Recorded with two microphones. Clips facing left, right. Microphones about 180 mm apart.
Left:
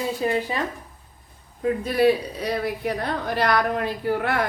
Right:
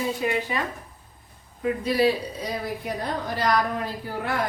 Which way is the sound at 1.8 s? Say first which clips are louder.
Left 3 dB; 55° left (ahead or behind).